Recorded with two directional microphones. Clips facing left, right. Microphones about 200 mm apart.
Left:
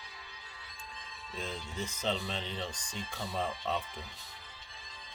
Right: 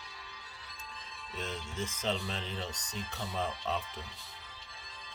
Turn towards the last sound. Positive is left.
turn(degrees=0)  # may be behind; listen again after turning